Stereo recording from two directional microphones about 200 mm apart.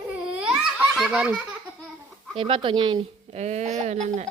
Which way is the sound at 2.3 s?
25° right (ahead or behind).